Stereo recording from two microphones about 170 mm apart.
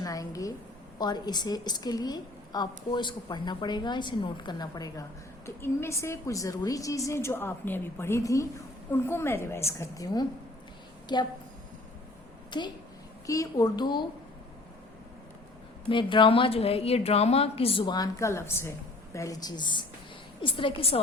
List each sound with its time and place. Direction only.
0.0 s a sound: 20° left (ahead or behind)
0.9 s a woman's voice: 25° left (ahead or behind)
12.5 s a woman's voice: 25° left (ahead or behind)
15.9 s a woman's voice: 30° left (ahead or behind)